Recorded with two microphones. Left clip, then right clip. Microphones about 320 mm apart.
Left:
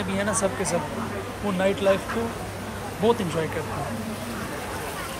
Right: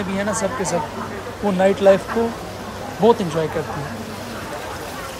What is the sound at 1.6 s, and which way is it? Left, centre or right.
Speech, centre.